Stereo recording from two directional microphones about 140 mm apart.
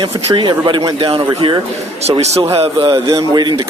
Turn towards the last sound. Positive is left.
turn(degrees=-30)  # may be behind; listen again after turning